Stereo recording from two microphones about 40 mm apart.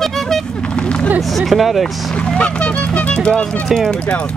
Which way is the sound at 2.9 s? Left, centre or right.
Left.